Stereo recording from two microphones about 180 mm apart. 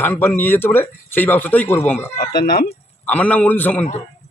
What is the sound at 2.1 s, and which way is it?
Speech, 55° left (ahead or behind).